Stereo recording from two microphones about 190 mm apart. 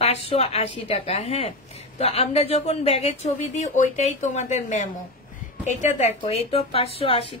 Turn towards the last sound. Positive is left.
turn(degrees=30)  # may be behind; listen again after turning